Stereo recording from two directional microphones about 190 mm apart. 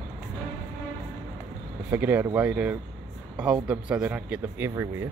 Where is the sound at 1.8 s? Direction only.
10° right (ahead or behind).